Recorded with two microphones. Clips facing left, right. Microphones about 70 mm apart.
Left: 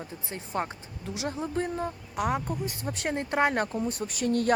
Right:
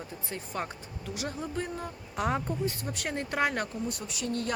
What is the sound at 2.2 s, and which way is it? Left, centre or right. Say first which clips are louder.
Speech: left 1 dB; centre.